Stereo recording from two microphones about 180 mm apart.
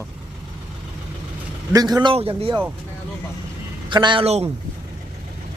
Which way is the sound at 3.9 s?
25° right (ahead or behind).